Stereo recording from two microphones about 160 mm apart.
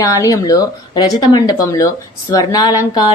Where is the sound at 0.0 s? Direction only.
20° left (ahead or behind).